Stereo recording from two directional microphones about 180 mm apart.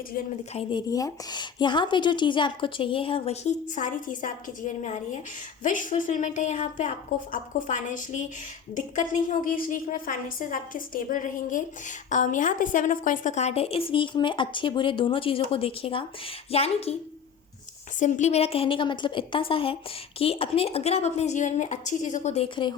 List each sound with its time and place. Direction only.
0.5 s a woman's voice: 25° left (ahead or behind)
18.0 s a woman's voice: 40° left (ahead or behind)